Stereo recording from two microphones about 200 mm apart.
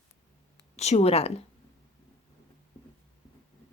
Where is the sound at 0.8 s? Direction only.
35° left (ahead or behind).